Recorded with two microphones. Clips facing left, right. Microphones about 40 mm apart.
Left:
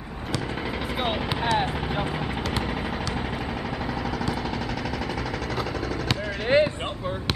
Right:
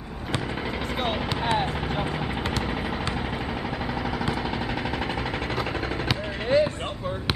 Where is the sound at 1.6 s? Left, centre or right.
Centre; by 5.1 s right.